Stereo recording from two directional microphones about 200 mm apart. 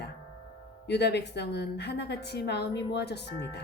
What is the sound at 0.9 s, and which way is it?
Speech, 55° left (ahead or behind).